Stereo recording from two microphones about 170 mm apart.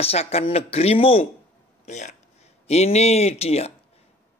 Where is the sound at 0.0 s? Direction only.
35° left (ahead or behind).